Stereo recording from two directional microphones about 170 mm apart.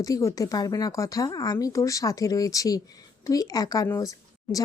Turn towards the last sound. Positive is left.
turn(degrees=20)  # may be behind; listen again after turning